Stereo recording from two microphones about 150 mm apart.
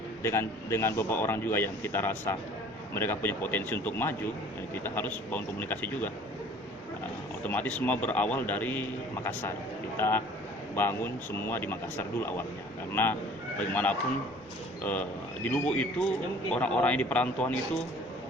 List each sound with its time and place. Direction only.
0.2 s speech: 15° left (ahead or behind)
7.4 s speech: 10° left (ahead or behind)
15.4 s speech: 10° left (ahead or behind)